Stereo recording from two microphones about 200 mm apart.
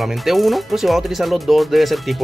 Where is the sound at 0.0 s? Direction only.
Centre (ahead or behind).